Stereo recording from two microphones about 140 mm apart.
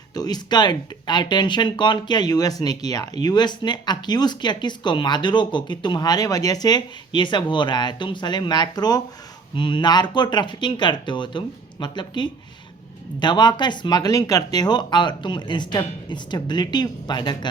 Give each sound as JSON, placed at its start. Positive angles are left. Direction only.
{"t": 0.1, "sound": "speech", "side_deg": 30}